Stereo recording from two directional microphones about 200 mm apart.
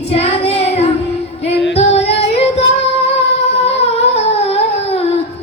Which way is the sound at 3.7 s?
30° left (ahead or behind).